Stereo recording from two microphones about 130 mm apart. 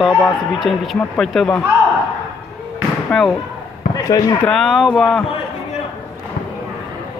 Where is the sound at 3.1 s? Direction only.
5° left (ahead or behind).